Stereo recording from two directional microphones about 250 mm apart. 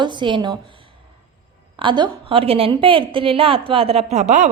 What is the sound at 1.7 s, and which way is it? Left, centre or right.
A woman's voice, centre.